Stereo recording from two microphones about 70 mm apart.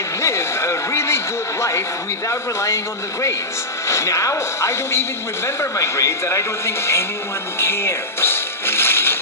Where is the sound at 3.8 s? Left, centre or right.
Left.